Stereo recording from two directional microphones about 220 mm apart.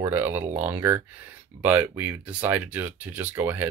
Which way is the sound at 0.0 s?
10° right (ahead or behind).